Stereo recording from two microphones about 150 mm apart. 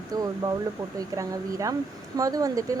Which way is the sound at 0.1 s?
25° right (ahead or behind).